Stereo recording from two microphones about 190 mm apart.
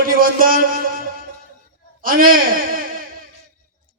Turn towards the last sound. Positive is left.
turn(degrees=-50)  # may be behind; listen again after turning